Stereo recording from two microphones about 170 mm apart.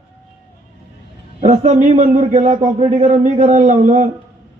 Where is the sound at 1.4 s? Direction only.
45° right (ahead or behind).